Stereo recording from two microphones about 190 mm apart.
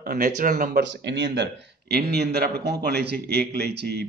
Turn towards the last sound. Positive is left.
turn(degrees=-60)  # may be behind; listen again after turning